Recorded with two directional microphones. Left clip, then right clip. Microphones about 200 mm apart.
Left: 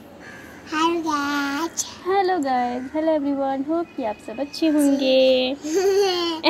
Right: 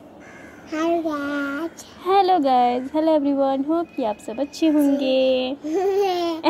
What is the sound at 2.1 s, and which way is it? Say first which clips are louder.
Speech: right 4 dB; 30° right (ahead or behind).